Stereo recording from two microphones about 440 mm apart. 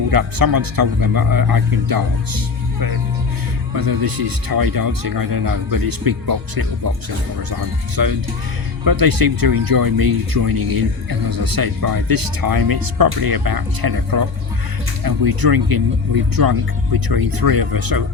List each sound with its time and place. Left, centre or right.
0.1 s speech: right
3.8 s speech: right